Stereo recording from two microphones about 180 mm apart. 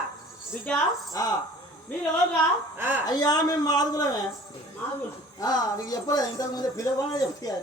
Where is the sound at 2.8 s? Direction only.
10° right (ahead or behind).